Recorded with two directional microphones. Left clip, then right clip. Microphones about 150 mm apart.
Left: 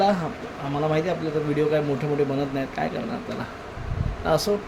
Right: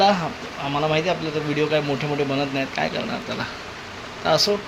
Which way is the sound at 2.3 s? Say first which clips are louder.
Right 3 dB; 15° left (ahead or behind).